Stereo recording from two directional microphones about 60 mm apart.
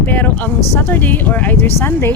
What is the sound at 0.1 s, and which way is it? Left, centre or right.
Speech, left.